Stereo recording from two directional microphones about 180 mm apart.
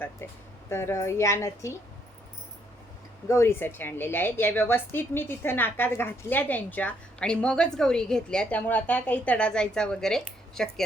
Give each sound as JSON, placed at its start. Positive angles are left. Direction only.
{"t": 0.2, "sound": "a woman's voice", "side_deg": 10}
{"t": 3.2, "sound": "a woman's voice", "side_deg": 15}